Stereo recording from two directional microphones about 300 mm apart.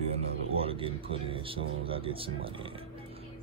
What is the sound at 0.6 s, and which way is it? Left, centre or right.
Speech, centre.